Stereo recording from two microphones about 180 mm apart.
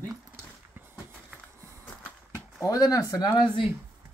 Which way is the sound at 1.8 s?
10° left (ahead or behind).